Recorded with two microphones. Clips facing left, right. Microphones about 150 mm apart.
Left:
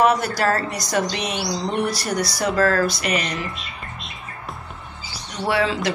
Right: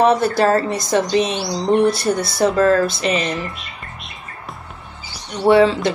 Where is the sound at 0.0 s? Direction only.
25° right (ahead or behind).